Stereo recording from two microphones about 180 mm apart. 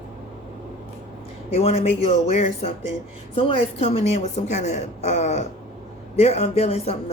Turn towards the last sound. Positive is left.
turn(degrees=35)  # may be behind; listen again after turning